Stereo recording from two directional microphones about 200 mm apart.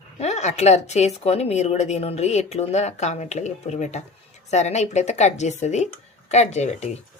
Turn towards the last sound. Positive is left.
turn(degrees=35)  # may be behind; listen again after turning